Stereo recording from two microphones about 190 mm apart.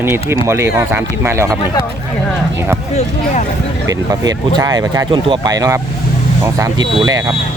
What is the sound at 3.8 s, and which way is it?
Speech, 20° right (ahead or behind).